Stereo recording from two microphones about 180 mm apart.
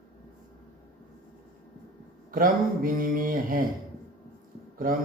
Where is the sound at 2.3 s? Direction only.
50° right (ahead or behind).